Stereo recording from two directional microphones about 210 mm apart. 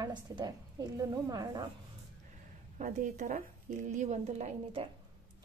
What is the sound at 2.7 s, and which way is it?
A woman's voice, 35° right (ahead or behind).